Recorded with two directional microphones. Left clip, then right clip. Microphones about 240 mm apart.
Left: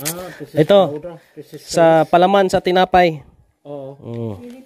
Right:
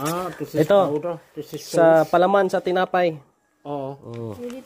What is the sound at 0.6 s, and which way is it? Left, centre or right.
Speech, left.